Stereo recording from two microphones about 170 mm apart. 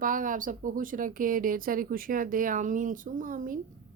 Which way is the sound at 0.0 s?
50° right (ahead or behind).